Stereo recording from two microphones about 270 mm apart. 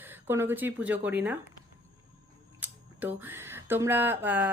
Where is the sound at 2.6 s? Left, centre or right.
Centre.